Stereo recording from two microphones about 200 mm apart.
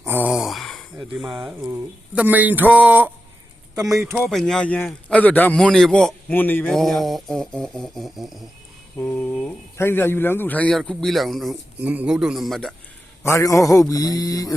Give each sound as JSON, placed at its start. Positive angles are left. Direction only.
{"t": 0.1, "sound": "a sound", "side_deg": -5}
{"t": 2.1, "sound": "speech", "side_deg": -10}
{"t": 4.2, "sound": "a man's voice", "side_deg": 5}
{"t": 9.0, "sound": "a sound", "side_deg": 10}
{"t": 9.7, "sound": "a man's voice", "side_deg": 10}
{"t": 13.2, "sound": "speech", "side_deg": 15}